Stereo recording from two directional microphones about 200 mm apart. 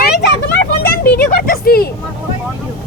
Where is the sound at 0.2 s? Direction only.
55° left (ahead or behind).